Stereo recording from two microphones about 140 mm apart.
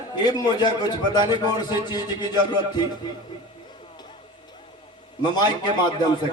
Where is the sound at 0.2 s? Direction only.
30° left (ahead or behind).